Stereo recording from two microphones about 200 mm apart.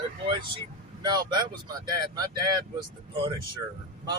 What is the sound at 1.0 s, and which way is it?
Speech, 20° right (ahead or behind).